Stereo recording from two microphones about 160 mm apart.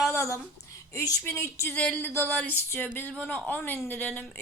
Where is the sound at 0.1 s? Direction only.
20° left (ahead or behind).